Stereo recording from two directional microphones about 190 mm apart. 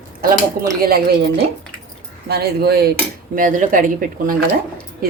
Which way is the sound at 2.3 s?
55° right (ahead or behind).